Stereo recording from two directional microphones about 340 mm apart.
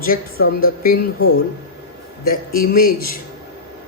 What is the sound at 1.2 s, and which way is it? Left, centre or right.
Speech, left.